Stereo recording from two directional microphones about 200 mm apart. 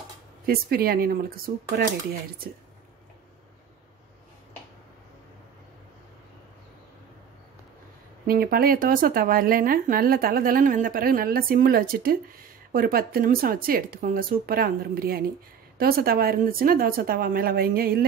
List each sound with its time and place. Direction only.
0.5 s a woman's voice: 50° right (ahead or behind)
8.3 s a woman's voice: 50° right (ahead or behind)